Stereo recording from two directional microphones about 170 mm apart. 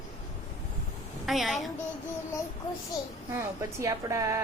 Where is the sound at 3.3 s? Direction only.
15° right (ahead or behind).